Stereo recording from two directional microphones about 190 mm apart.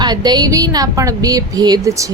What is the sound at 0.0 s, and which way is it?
A woman's voice, 20° right (ahead or behind).